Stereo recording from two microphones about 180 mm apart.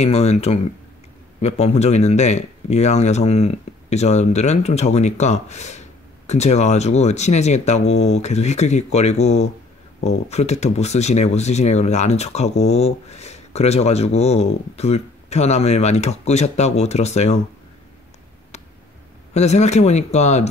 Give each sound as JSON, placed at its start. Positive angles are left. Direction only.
{"t": 0.0, "sound": "speech", "side_deg": 35}
{"t": 19.3, "sound": "speech", "side_deg": 40}